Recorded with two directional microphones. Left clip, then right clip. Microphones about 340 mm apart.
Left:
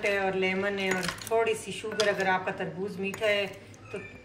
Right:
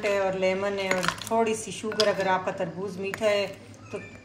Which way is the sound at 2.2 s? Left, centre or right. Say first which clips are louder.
Right 2 dB; right.